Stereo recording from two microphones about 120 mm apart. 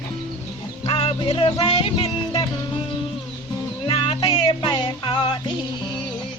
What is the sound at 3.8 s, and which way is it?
Music, 45° left (ahead or behind).